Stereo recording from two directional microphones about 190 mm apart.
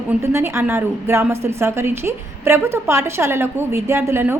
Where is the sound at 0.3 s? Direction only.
15° right (ahead or behind).